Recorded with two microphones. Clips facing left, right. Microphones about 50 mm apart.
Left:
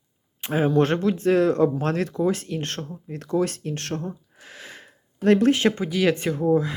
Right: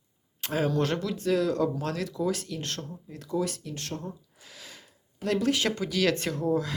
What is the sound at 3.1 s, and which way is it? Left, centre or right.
Speech, left.